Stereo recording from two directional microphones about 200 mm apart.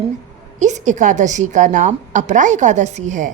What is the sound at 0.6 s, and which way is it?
A woman's voice, 35° right (ahead or behind).